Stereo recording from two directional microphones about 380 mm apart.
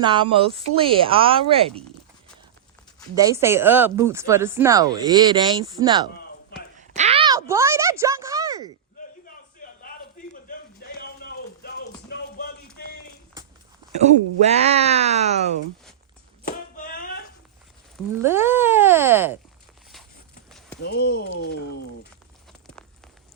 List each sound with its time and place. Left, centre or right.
0.0 s speech: centre
3.2 s speech: centre
6.7 s a sound: centre
9.2 s a sound: left
12.0 s music: left
14.0 s speech: centre
16.5 s a sound: left
18.2 s speech: centre
20.8 s speech: left